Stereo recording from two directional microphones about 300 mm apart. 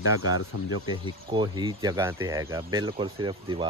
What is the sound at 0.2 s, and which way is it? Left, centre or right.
Speech, left.